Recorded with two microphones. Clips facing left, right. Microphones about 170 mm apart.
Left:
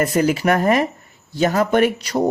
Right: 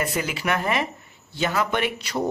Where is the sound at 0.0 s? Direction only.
45° left (ahead or behind).